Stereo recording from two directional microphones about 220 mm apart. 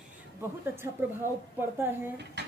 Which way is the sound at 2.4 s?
50° right (ahead or behind).